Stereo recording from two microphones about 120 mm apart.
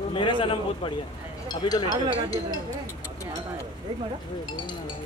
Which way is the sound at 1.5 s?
35° left (ahead or behind).